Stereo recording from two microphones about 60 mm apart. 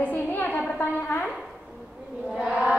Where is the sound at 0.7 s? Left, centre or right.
Left.